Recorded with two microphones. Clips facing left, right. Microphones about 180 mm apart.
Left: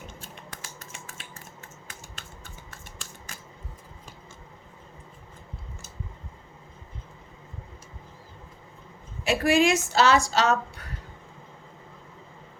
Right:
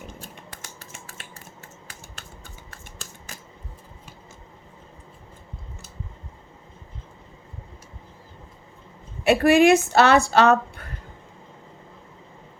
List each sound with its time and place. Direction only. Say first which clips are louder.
9.2 s speech: right 6 dB; 60° right (ahead or behind)